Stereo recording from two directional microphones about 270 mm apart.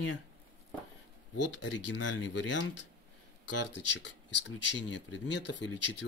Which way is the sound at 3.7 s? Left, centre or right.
Left.